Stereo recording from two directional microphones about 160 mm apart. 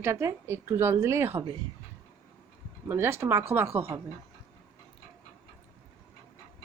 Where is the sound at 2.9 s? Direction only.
15° right (ahead or behind).